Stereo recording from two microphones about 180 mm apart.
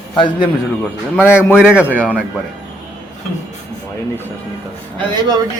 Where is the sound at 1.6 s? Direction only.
5° right (ahead or behind).